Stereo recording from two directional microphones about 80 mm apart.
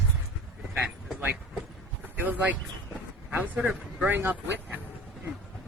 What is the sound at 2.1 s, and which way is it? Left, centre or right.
Speech, right.